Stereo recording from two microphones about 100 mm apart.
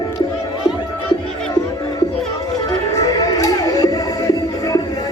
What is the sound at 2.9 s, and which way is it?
Music, 40° left (ahead or behind).